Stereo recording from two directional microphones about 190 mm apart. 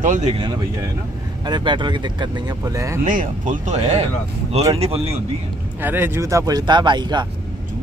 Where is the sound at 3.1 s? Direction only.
45° right (ahead or behind).